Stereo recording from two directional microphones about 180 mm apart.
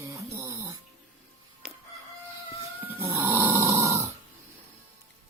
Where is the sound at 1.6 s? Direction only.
5° right (ahead or behind).